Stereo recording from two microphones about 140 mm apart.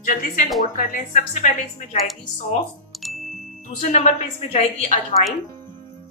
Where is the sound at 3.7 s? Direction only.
60° left (ahead or behind).